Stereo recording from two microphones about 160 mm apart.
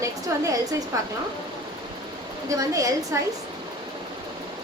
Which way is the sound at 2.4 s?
20° right (ahead or behind).